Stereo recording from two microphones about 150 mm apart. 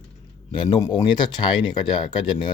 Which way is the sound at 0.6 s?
25° left (ahead or behind).